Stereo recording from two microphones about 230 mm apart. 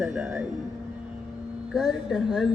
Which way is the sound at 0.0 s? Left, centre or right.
Centre.